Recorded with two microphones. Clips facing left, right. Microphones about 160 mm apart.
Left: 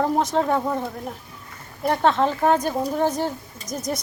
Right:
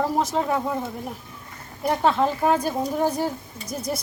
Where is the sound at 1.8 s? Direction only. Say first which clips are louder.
Left 1 dB; 5° right (ahead or behind).